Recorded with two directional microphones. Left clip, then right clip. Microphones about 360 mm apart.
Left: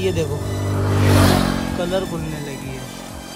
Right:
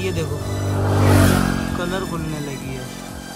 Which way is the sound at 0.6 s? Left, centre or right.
Right.